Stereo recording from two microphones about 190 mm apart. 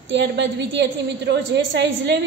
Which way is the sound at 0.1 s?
70° right (ahead or behind).